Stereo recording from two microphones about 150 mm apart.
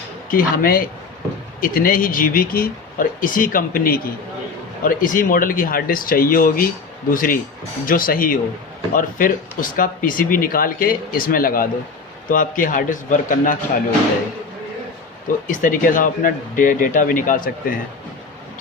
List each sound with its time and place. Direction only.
0.3 s speech: 70° left (ahead or behind)
4.8 s speech: 65° left (ahead or behind)
15.4 s speech: 60° left (ahead or behind)